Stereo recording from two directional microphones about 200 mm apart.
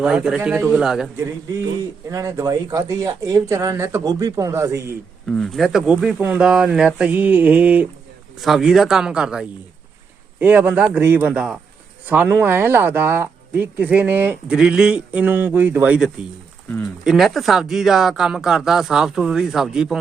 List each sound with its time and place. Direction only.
0.0 s speech: 5° right (ahead or behind)
2.0 s speech: 15° right (ahead or behind)
5.3 s speech: centre (ahead or behind)